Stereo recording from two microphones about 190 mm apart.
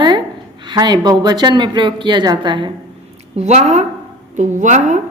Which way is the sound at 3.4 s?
35° right (ahead or behind).